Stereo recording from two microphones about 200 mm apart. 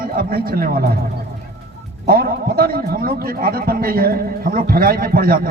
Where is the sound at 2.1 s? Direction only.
50° right (ahead or behind).